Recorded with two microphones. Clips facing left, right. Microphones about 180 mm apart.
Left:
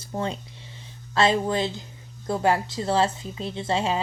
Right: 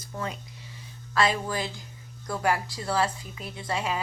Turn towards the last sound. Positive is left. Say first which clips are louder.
# left 5 dB
turn(degrees=25)  # may be behind; listen again after turning